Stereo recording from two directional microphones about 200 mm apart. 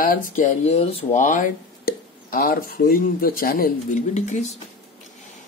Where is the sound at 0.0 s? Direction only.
40° left (ahead or behind).